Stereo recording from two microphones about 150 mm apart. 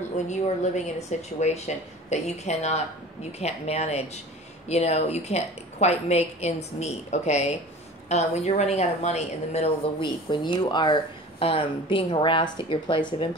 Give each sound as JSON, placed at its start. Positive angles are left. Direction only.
{"t": 0.8, "sound": "a woman's voice", "side_deg": 45}